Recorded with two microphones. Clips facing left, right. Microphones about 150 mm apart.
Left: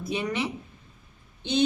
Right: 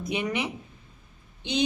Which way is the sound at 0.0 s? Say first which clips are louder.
Even; 15° right (ahead or behind).